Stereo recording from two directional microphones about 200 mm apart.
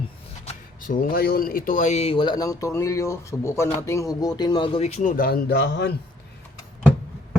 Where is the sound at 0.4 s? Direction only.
45° left (ahead or behind); by 5.9 s 60° left (ahead or behind).